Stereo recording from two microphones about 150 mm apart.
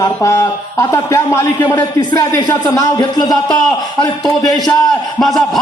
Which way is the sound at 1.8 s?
25° left (ahead or behind).